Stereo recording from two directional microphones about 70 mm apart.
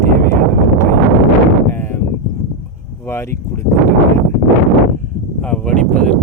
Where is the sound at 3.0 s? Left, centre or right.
Left.